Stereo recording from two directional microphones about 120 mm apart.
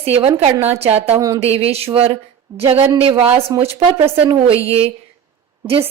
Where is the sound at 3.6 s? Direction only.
45° right (ahead or behind).